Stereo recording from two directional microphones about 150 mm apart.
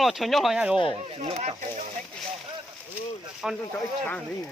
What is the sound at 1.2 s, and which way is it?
Speech, 40° right (ahead or behind).